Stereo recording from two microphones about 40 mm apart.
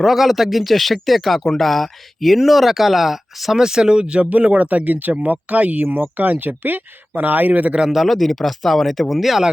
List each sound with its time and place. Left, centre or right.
0.0 s speech: centre; by 5.9 s right
5.9 s speech: right
7.9 s speech: centre